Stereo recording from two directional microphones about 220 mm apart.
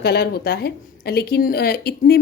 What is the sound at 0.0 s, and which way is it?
A woman's voice, 45° left (ahead or behind).